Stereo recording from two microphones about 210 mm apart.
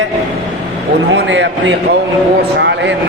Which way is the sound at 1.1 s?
60° right (ahead or behind).